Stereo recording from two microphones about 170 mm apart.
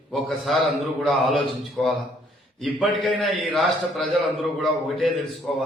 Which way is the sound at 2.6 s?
Centre (ahead or behind).